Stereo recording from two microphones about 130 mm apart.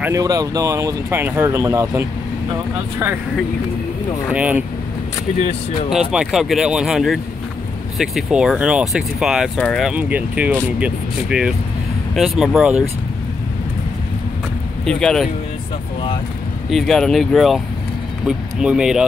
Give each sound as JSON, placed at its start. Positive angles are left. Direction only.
{"t": 0.1, "sound": "speech", "side_deg": -25}
{"t": 4.3, "sound": "speech", "side_deg": -10}
{"t": 5.4, "sound": "speech", "side_deg": 60}
{"t": 5.9, "sound": "speech", "side_deg": -5}
{"t": 14.9, "sound": "speech", "side_deg": 5}
{"t": 16.7, "sound": "speech", "side_deg": 0}